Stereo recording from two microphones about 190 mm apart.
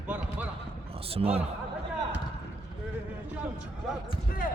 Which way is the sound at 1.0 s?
30° right (ahead or behind).